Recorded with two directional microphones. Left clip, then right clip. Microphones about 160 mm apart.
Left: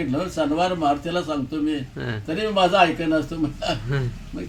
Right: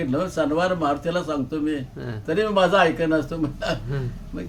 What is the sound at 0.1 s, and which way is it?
A man's voice, 10° right (ahead or behind).